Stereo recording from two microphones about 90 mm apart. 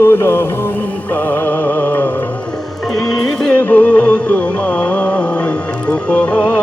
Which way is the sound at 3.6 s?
20° left (ahead or behind).